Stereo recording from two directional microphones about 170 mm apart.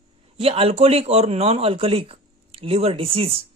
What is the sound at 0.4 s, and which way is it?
Speech, 35° right (ahead or behind).